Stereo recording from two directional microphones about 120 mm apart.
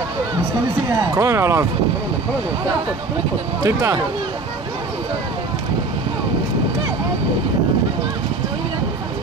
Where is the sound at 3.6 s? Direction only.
25° right (ahead or behind).